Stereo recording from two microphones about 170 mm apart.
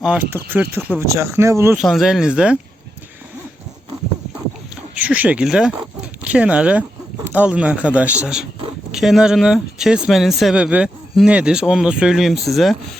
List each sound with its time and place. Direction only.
0.0 s speech: 10° right (ahead or behind)
1.7 s speech: centre (ahead or behind)
4.9 s speech: 10° right (ahead or behind)